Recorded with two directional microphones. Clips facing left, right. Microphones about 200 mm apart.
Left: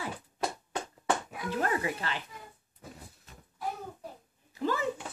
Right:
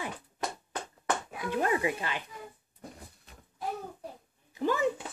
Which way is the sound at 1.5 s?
15° right (ahead or behind).